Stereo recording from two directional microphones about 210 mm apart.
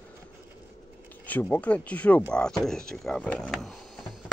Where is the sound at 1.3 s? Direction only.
5° left (ahead or behind).